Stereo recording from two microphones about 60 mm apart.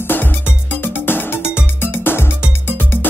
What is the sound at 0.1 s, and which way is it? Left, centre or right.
Music, left.